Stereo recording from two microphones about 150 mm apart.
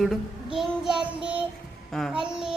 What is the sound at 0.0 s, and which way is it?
Child singing, centre (ahead or behind).